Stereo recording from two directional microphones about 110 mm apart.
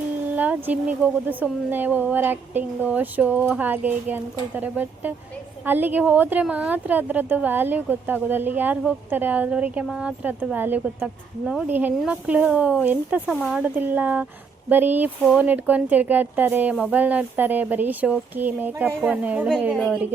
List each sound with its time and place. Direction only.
0.3 s speech: 15° right (ahead or behind)